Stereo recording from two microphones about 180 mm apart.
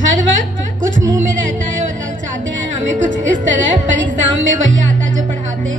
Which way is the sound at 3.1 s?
90° right.